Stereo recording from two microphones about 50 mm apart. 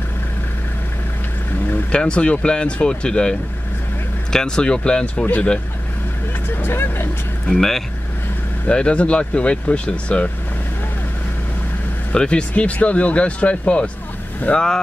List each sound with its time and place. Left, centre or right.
1.9 s speech: left
6.5 s vehicle: left
7.4 s speech: centre
8.6 s speech: left
12.1 s speech: centre